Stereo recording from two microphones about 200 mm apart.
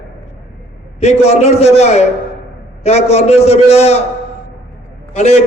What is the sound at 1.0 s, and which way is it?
A man's voice, 35° left (ahead or behind).